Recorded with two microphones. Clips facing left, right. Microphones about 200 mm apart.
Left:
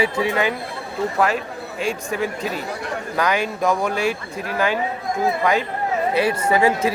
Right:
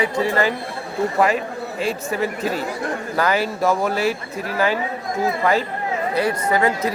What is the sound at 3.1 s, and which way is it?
Speech, 5° right (ahead or behind).